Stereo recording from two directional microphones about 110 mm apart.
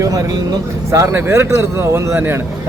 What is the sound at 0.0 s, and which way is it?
Speech, 35° right (ahead or behind).